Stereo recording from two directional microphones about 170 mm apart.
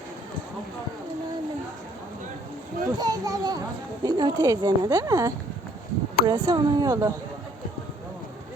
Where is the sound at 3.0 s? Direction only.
20° right (ahead or behind).